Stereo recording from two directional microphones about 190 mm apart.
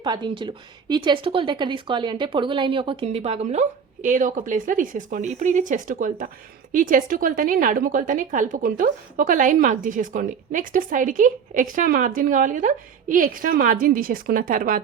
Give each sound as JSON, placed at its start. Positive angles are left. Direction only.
{"t": 0.0, "sound": "a woman's voice", "side_deg": -25}